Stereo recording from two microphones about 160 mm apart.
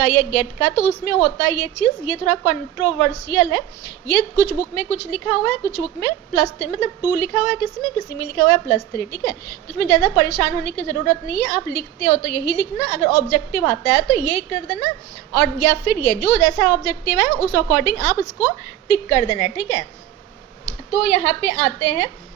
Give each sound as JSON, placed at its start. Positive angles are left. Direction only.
{"t": 0.0, "sound": "a woman's voice", "side_deg": 5}
{"t": 18.9, "sound": "a woman's voice", "side_deg": 25}
{"t": 21.0, "sound": "a woman's voice", "side_deg": 45}